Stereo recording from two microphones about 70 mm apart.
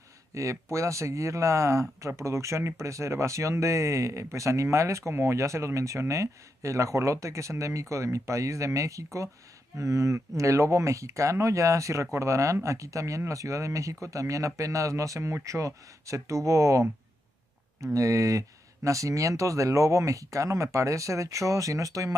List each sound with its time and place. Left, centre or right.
0.3 s speech: right
17.9 s speech: right